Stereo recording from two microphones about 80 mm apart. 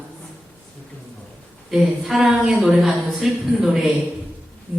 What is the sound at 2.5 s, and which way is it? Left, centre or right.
Speech, centre.